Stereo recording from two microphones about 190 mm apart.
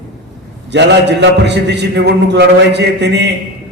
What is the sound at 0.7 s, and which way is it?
Speech, 65° right (ahead or behind).